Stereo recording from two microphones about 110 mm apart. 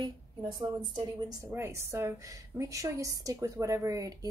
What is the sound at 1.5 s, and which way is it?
A woman's voice, 25° right (ahead or behind).